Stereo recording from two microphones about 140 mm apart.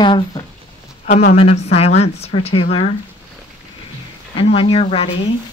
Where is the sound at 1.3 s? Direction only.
50° left (ahead or behind).